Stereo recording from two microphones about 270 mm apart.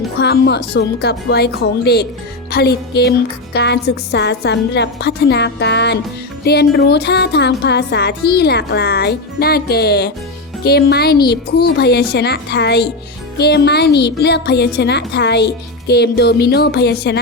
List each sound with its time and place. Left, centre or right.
0.2 s speech: left